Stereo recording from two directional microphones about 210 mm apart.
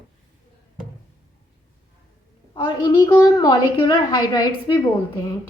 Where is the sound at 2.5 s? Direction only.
20° left (ahead or behind).